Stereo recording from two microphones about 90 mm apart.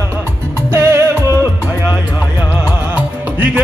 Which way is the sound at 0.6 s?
30° right (ahead or behind).